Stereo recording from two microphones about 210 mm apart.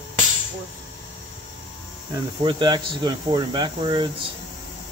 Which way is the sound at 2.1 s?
20° right (ahead or behind).